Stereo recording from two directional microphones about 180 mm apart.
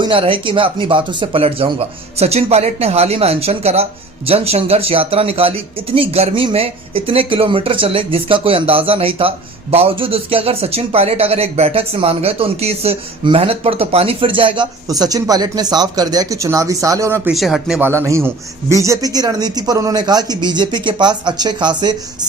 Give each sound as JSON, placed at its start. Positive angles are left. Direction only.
{"t": 0.0, "sound": "speech", "side_deg": -30}
{"t": 17.3, "sound": "speech", "side_deg": 0}